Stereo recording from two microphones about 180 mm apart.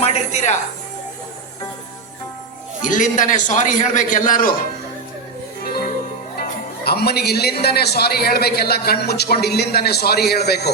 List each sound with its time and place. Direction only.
0.0 s a woman's voice: 40° left (ahead or behind)
2.8 s a man's voice: 45° left (ahead or behind)
6.8 s a man's voice: 60° left (ahead or behind)